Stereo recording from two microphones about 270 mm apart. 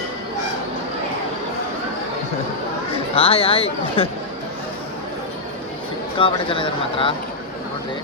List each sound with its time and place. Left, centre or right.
2.9 s speech: centre
6.1 s speech: centre